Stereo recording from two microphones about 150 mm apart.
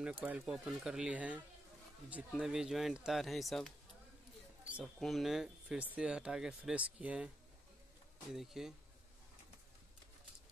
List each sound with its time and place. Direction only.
0.0 s speech: 10° right (ahead or behind)
8.3 s speech: 5° right (ahead or behind)